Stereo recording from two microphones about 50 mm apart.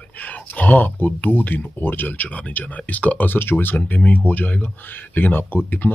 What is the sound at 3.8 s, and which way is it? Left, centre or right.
Speech, left.